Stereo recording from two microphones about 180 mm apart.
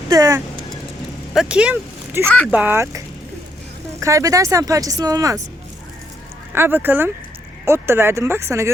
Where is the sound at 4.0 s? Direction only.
15° right (ahead or behind).